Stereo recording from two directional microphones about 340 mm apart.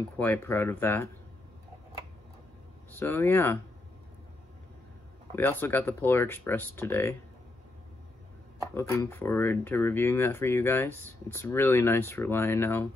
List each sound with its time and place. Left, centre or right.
0.2 s speech: centre
3.0 s speech: centre
5.3 s speech: centre
8.7 s speech: centre